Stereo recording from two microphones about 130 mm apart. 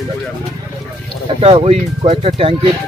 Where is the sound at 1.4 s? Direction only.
50° right (ahead or behind).